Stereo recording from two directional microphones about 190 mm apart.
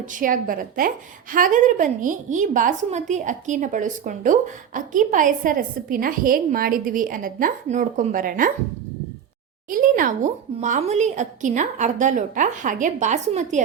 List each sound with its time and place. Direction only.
0.0 s a woman's voice: 45° right (ahead or behind)
9.6 s speech: 45° right (ahead or behind)